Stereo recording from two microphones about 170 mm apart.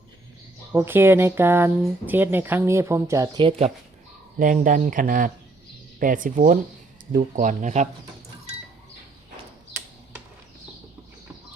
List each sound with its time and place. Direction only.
0.7 s speech: 10° right (ahead or behind)
4.4 s speech: 50° right (ahead or behind)